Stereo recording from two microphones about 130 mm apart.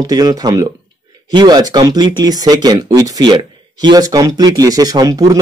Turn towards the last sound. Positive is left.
turn(degrees=-30)  # may be behind; listen again after turning